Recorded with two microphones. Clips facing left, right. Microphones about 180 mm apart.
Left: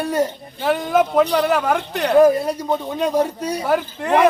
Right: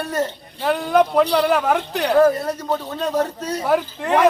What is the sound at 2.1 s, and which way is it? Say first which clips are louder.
Speech: left 3 dB; 15° left (ahead or behind).